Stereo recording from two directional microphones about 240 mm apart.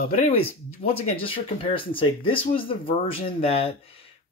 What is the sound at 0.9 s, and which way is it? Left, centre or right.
Speech, left.